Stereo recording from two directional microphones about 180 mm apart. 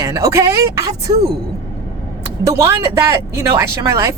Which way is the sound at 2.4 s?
15° right (ahead or behind).